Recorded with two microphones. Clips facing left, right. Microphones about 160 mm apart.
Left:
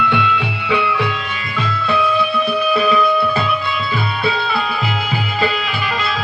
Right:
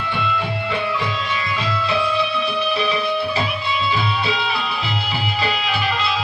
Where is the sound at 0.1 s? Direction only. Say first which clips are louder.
Left 4 dB; 70° left (ahead or behind).